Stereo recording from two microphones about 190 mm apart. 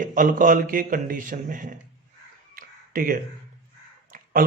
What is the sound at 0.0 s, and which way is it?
A man's voice, 45° right (ahead or behind).